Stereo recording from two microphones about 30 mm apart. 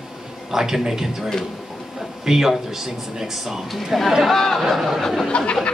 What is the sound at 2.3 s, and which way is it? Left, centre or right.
Speech, centre.